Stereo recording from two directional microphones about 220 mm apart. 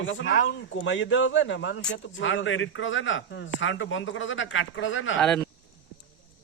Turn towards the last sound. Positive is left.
turn(degrees=5)  # may be behind; listen again after turning